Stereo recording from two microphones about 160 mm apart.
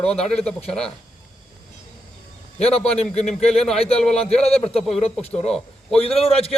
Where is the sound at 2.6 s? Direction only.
40° left (ahead or behind).